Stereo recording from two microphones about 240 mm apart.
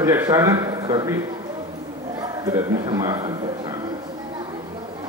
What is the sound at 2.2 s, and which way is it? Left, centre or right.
A man's voice, centre.